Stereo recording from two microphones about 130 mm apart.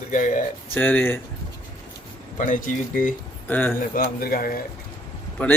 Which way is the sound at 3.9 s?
90° left.